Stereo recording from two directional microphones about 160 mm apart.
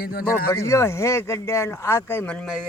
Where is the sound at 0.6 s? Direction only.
15° left (ahead or behind).